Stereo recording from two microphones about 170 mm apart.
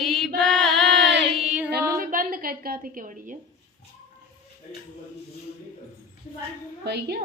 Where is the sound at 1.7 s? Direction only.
60° right (ahead or behind).